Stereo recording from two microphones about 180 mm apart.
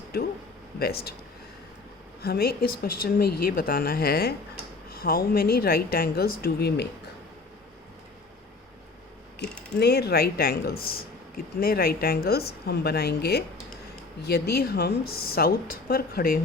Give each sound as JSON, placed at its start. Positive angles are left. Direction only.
{"t": 0.1, "sound": "speech", "side_deg": 60}
{"t": 2.2, "sound": "speech", "side_deg": 60}
{"t": 9.7, "sound": "speech", "side_deg": 65}